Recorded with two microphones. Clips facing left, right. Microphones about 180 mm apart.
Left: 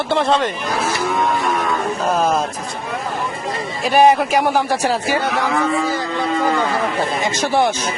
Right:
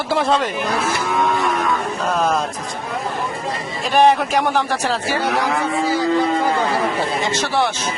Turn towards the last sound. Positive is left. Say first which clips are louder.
# left 3 dB
turn(degrees=15)  # may be behind; listen again after turning